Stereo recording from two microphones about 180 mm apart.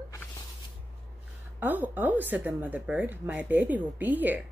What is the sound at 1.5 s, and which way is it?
Speech, 10° right (ahead or behind).